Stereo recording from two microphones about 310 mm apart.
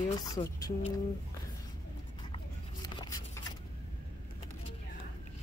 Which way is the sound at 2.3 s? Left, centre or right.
Centre.